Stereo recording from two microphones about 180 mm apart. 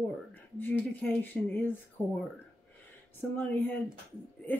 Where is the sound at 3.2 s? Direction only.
10° left (ahead or behind).